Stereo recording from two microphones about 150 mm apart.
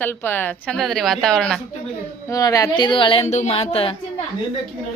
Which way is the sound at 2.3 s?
25° left (ahead or behind).